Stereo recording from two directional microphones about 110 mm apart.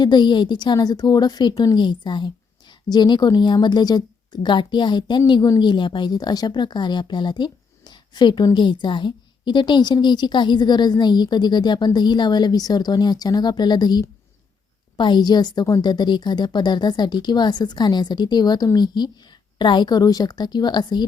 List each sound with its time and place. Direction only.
0.0 s a woman's voice: 45° left (ahead or behind)